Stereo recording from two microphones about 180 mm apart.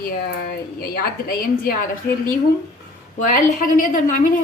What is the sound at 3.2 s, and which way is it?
A woman's voice, 50° left (ahead or behind).